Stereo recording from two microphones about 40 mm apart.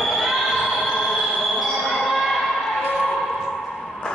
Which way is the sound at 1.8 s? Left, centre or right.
Centre.